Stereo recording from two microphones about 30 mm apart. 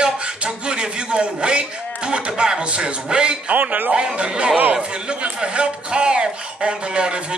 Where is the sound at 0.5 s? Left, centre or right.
Right.